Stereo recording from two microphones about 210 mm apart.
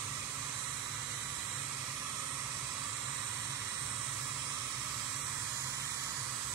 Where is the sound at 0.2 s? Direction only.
15° right (ahead or behind).